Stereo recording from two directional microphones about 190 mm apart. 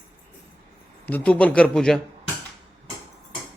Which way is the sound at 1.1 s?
10° left (ahead or behind).